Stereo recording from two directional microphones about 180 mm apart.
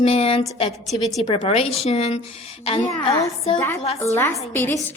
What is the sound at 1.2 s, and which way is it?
Speech, 30° left (ahead or behind).